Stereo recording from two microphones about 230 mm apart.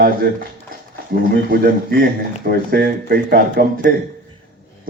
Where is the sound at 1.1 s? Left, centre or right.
Right.